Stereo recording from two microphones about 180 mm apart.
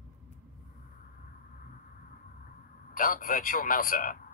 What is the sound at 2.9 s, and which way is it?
A man's voice, 50° left (ahead or behind).